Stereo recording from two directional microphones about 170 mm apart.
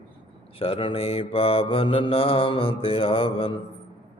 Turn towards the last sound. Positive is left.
turn(degrees=35)  # may be behind; listen again after turning